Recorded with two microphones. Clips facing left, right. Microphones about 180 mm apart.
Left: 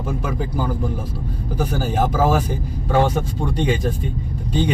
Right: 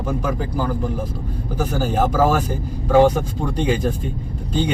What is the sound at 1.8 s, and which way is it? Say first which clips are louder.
Speech: right 2 dB; 5° left (ahead or behind).